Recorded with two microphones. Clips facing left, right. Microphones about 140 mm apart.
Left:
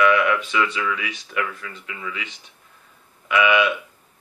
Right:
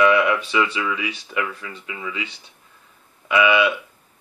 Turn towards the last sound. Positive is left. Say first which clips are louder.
# right 1 dB
turn(degrees=-25)  # may be behind; listen again after turning